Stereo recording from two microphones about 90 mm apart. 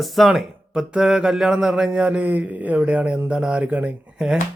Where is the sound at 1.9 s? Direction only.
15° right (ahead or behind).